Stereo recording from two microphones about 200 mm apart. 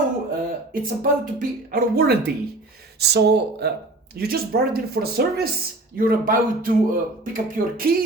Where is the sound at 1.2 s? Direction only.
45° right (ahead or behind).